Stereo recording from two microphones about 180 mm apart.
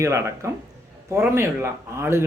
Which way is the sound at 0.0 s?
15° right (ahead or behind).